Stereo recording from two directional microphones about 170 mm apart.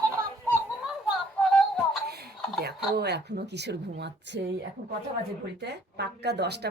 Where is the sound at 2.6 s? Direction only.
70° right (ahead or behind); by 4.4 s 90° right.